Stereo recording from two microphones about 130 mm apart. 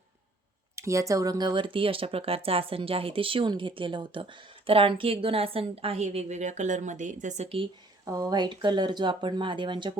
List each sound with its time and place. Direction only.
0.8 s speech: 25° right (ahead or behind); by 7.4 s 70° right (ahead or behind)
8.0 s speech: 30° right (ahead or behind)